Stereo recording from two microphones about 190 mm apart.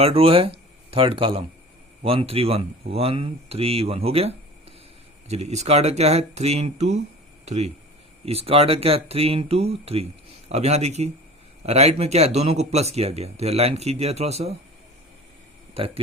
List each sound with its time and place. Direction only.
0.0 s speech: 30° right (ahead or behind)
15.8 s speech: 30° right (ahead or behind)